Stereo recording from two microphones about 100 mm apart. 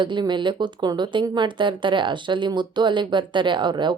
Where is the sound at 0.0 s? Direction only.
50° right (ahead or behind).